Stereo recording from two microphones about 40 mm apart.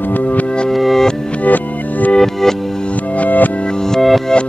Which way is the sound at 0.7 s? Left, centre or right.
Centre.